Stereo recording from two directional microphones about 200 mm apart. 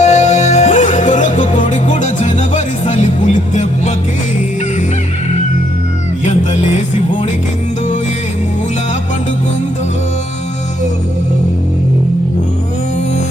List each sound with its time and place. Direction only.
0.0 s music: 35° left (ahead or behind)
6.2 s music: 35° left (ahead or behind)